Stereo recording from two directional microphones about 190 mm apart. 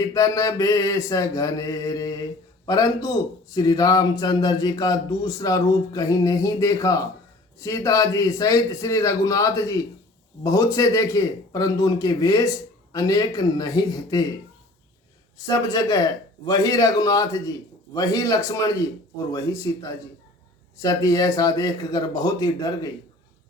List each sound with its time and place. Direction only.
0.0 s mantra: 15° left (ahead or behind)
2.6 s a man's voice: 20° left (ahead or behind)
7.6 s mantra: 15° left (ahead or behind)
10.4 s a man's voice: 15° left (ahead or behind)
15.4 s a man's voice: 20° left (ahead or behind)
19.3 s mantra: 15° left (ahead or behind)
20.7 s a man's voice: 20° left (ahead or behind)